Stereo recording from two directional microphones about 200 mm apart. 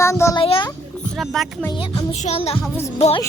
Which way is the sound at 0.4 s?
25° left (ahead or behind).